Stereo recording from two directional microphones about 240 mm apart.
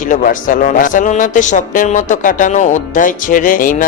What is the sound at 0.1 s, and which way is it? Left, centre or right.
A man's voice, left.